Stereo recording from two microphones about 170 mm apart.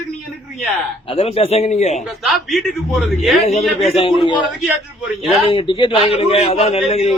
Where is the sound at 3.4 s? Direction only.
35° left (ahead or behind).